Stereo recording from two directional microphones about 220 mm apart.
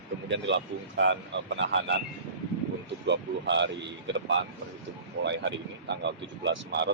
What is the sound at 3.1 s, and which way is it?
Speech, 55° right (ahead or behind).